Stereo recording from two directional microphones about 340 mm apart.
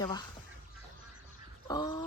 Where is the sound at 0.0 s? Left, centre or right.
Centre.